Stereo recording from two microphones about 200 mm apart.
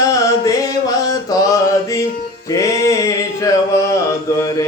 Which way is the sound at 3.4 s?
15° left (ahead or behind).